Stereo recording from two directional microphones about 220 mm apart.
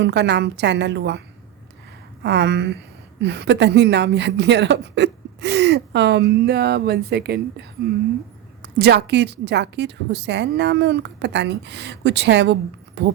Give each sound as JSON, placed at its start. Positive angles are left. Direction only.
{"t": 0.0, "sound": "a woman's voice", "side_deg": -50}
{"t": 2.2, "sound": "a woman's voice", "side_deg": -50}